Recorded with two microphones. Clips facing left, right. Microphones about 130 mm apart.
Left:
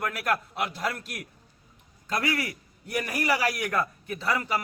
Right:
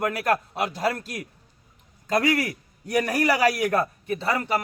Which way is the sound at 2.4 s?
45° right (ahead or behind).